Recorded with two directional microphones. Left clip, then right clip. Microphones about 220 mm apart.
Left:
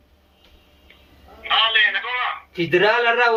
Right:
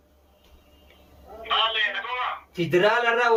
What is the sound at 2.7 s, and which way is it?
Speech, 5° right (ahead or behind).